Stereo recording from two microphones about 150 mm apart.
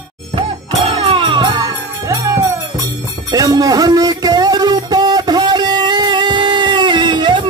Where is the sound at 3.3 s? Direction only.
25° right (ahead or behind).